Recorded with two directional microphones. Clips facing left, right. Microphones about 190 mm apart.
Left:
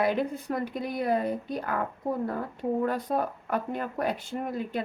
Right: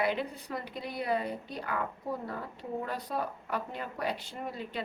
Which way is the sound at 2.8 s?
50° left (ahead or behind).